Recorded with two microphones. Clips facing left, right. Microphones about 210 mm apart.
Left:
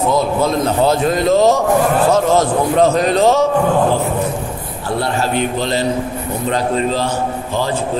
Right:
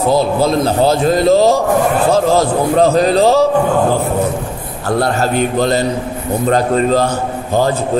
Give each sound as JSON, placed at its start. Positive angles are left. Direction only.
{"t": 0.1, "sound": "a man's voice", "side_deg": -35}
{"t": 4.8, "sound": "a man's voice", "side_deg": -45}